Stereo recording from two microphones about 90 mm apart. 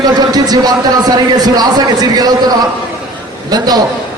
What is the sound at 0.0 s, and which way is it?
A man's voice, 45° right (ahead or behind).